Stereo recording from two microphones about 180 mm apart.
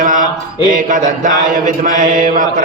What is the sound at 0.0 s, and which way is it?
Mantra, 50° right (ahead or behind).